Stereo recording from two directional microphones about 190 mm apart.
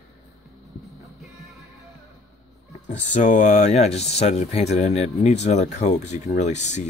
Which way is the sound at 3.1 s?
40° left (ahead or behind).